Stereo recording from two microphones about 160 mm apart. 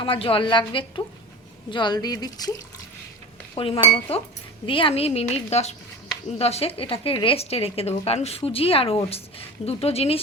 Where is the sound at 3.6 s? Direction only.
35° left (ahead or behind).